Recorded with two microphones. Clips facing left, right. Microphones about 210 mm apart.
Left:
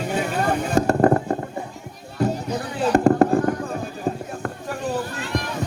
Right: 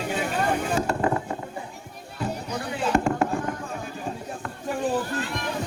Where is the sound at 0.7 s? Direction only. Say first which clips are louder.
Left 7 dB; 40° left (ahead or behind).